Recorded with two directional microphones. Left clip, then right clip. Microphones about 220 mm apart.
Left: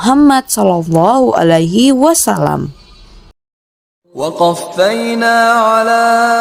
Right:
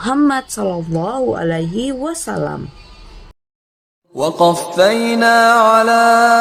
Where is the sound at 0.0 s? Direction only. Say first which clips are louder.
Left 6 dB; 35° left (ahead or behind).